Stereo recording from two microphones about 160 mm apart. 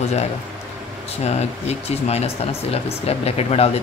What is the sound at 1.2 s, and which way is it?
Speech, 40° left (ahead or behind).